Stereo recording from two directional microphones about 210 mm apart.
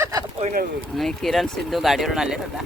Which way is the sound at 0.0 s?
15° right (ahead or behind).